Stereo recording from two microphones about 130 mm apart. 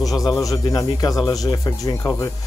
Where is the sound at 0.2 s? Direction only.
25° left (ahead or behind).